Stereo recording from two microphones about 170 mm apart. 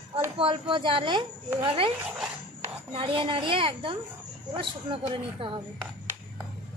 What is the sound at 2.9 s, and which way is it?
A woman's voice, 30° right (ahead or behind).